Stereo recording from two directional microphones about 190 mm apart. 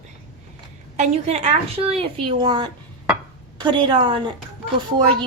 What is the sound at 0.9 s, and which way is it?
A woman's voice, 35° right (ahead or behind).